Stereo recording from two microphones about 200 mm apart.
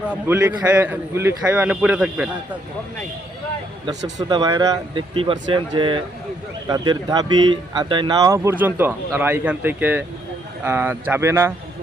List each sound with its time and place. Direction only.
0.0 s speech: 5° right (ahead or behind)
4.2 s speech: 20° right (ahead or behind)